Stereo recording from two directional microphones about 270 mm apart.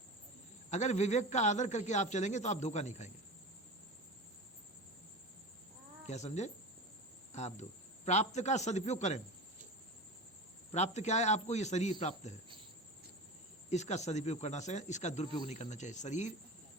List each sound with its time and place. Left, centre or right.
0.7 s speech: left
6.1 s speech: left
10.7 s speech: left
13.7 s speech: left